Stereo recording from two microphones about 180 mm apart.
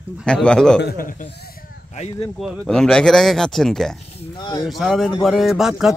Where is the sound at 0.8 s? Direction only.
55° left (ahead or behind).